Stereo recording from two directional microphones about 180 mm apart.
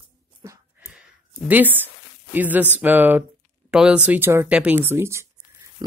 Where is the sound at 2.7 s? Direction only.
10° right (ahead or behind).